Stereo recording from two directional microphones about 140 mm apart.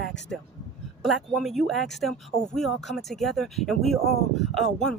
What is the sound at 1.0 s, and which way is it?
Speech, centre (ahead or behind).